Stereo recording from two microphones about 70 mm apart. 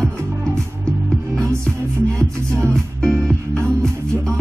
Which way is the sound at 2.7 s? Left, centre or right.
Centre.